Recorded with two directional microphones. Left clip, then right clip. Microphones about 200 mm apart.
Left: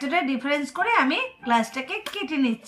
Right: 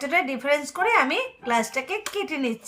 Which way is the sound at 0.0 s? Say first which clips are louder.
Right 1 dB; 35° right (ahead or behind).